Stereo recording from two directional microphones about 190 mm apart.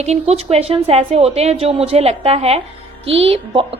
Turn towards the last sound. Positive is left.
turn(degrees=-30)  # may be behind; listen again after turning